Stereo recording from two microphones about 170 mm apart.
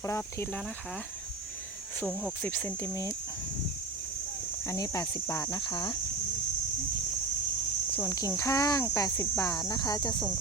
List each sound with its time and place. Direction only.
2.0 s speech: 10° left (ahead or behind)
4.7 s speech: 20° left (ahead or behind)
8.0 s speech: 20° left (ahead or behind)